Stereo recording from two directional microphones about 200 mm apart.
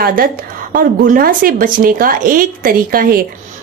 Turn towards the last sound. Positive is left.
turn(degrees=-45)  # may be behind; listen again after turning